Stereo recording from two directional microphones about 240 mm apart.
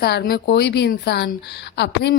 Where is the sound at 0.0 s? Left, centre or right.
Left.